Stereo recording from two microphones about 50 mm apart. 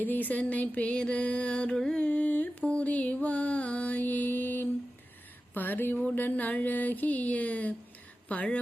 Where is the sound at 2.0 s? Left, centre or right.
Left.